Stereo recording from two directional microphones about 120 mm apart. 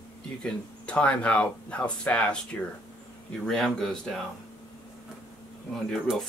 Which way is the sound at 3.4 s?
5° left (ahead or behind).